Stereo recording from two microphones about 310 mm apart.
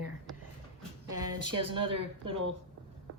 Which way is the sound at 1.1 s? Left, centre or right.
Right.